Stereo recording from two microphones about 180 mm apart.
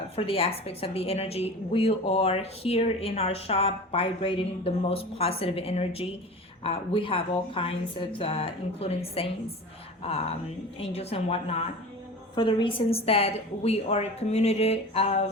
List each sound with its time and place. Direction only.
0.2 s a woman's voice: 35° left (ahead or behind)
10.8 s a woman's voice: 35° left (ahead or behind)